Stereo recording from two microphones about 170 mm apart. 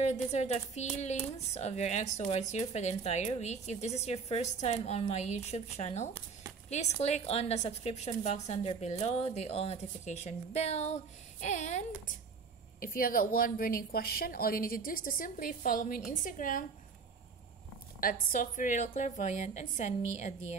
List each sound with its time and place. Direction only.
0.0 s a woman's voice: 40° left (ahead or behind)
12.8 s a woman's voice: 55° left (ahead or behind)
18.0 s a woman's voice: 55° left (ahead or behind)